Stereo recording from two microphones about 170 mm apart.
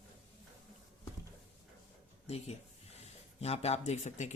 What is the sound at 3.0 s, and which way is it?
Speech, 40° left (ahead or behind).